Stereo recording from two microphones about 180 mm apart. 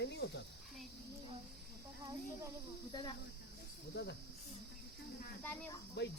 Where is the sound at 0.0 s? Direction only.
75° left (ahead or behind).